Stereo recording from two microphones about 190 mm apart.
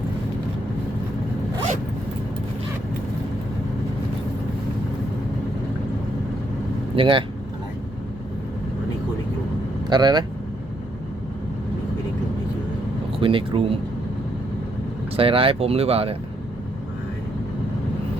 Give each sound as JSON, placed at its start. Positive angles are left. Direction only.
{"t": 6.9, "sound": "speech", "side_deg": -25}
{"t": 9.9, "sound": "speech", "side_deg": -20}
{"t": 13.1, "sound": "speech", "side_deg": -25}
{"t": 15.1, "sound": "speech", "side_deg": -30}